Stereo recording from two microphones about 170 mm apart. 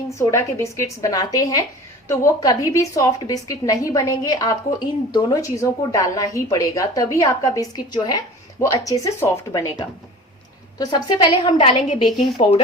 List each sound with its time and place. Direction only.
0.1 s a woman's voice: 15° left (ahead or behind)
10.8 s a woman's voice: 20° left (ahead or behind)